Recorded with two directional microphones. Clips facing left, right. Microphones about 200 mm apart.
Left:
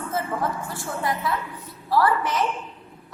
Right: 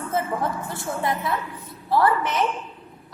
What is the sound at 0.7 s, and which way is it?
A woman's voice, 25° right (ahead or behind).